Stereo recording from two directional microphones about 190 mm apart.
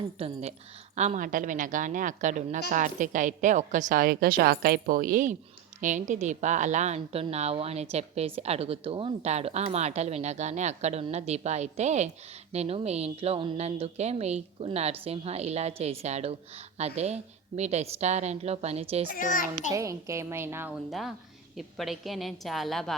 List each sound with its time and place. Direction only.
0.2 s a woman's voice: 30° right (ahead or behind)
19.1 s a child's voice: 45° left (ahead or behind)
19.7 s a woman's voice: 15° right (ahead or behind)
21.5 s a woman's voice: centre (ahead or behind)